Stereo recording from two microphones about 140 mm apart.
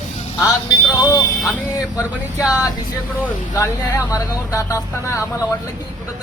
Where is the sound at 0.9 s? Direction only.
25° left (ahead or behind).